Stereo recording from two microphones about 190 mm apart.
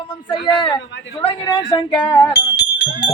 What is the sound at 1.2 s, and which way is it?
Speech, 25° left (ahead or behind).